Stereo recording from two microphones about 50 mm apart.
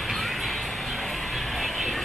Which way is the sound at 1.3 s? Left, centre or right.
Centre.